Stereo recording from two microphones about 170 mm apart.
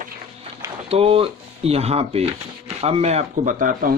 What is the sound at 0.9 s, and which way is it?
Speech, 35° right (ahead or behind).